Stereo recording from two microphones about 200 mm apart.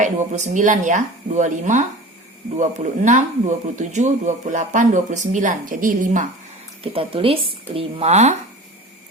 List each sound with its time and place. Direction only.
0.0 s speech: 35° right (ahead or behind)
6.8 s speech: 25° right (ahead or behind)